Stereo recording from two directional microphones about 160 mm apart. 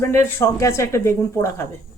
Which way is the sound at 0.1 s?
15° left (ahead or behind).